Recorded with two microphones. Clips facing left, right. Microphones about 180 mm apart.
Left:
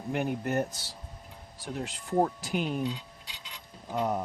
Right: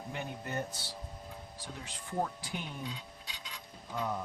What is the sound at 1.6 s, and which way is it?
Speech, 80° left.